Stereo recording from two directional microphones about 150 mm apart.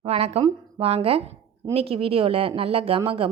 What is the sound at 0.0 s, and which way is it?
A woman's voice, 40° right (ahead or behind).